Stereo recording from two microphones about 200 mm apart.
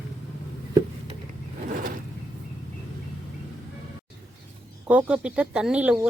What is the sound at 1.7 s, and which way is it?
Vehicle, 40° right (ahead or behind).